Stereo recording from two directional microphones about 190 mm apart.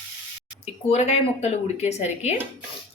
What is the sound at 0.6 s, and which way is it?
Speech, 35° left (ahead or behind).